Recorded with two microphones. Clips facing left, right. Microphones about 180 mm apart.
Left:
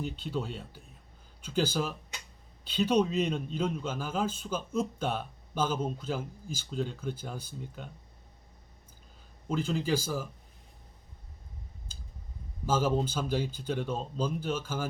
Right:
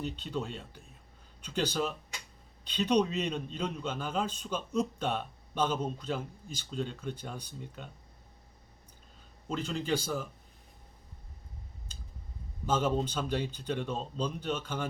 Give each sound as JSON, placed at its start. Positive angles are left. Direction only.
{"t": 0.0, "sound": "a man's voice", "side_deg": 5}
{"t": 9.5, "sound": "speech", "side_deg": 5}
{"t": 12.6, "sound": "a man's voice", "side_deg": 5}